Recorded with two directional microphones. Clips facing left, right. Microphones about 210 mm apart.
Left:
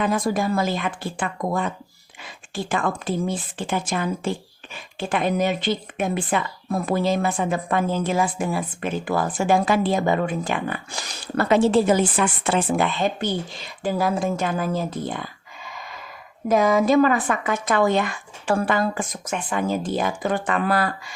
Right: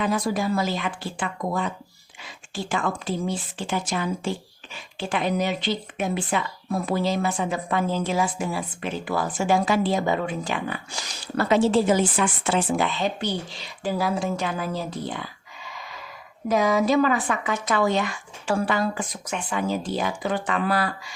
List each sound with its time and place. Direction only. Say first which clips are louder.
0.0 s speech: left 2 dB; 50° left (ahead or behind)
16.5 s speech: left 3 dB; 50° left (ahead or behind)